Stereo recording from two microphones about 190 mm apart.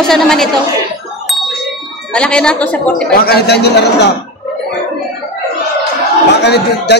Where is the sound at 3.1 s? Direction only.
55° left (ahead or behind).